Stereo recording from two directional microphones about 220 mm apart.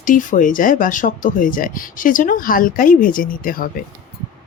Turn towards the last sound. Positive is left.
turn(degrees=40)  # may be behind; listen again after turning